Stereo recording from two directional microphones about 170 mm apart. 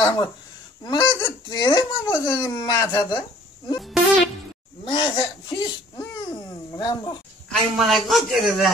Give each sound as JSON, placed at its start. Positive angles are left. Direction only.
{"t": 0.0, "sound": "speech", "side_deg": 25}
{"t": 4.8, "sound": "speech", "side_deg": 30}
{"t": 7.4, "sound": "a man's voice", "side_deg": 0}